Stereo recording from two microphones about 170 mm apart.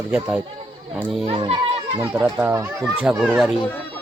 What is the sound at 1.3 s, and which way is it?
Speech, 35° right (ahead or behind).